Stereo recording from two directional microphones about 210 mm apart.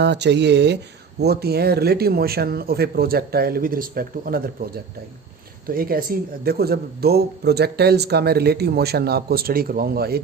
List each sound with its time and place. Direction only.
0.0 s speech: 55° right (ahead or behind)